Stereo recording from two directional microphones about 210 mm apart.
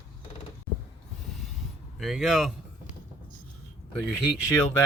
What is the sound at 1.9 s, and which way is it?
Speech, centre (ahead or behind).